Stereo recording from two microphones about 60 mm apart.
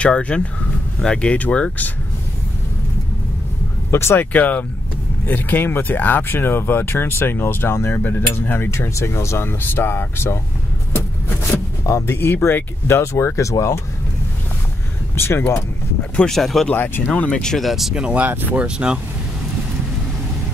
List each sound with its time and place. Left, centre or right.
0.0 s speech: centre
3.9 s speech: left
4.3 s speech: left
12.1 s speech: left
15.1 s speech: left
16.3 s speech: centre
16.7 s speech: left
17.0 s speech: centre
17.6 s speech: centre
17.9 s speech: centre
18.2 s speech: right
18.6 s speech: centre